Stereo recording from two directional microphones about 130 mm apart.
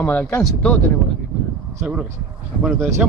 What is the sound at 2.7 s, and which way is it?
Speech, 20° right (ahead or behind).